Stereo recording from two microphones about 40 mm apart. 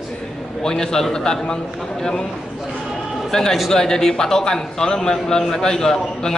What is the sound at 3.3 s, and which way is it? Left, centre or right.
A man's voice, centre.